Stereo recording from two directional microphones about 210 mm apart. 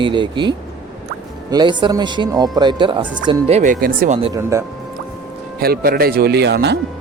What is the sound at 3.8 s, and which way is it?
Speech, 40° right (ahead or behind).